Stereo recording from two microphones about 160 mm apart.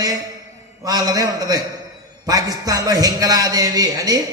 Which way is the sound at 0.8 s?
25° right (ahead or behind).